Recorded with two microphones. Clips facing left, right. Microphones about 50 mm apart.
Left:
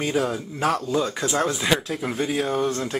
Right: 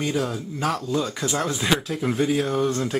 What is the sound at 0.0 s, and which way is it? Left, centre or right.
Speech, centre.